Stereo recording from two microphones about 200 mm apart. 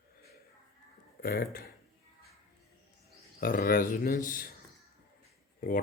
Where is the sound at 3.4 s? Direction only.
45° left (ahead or behind).